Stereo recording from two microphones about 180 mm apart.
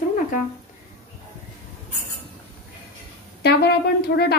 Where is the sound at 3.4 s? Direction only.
65° left (ahead or behind).